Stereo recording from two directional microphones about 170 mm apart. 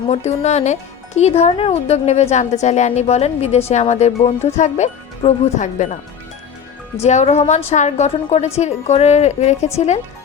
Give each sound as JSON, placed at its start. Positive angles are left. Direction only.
{"t": 0.1, "sound": "speech", "side_deg": 40}
{"t": 7.0, "sound": "speech", "side_deg": 40}